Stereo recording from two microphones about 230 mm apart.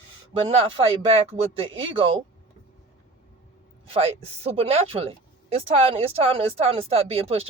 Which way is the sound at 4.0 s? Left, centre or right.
Right.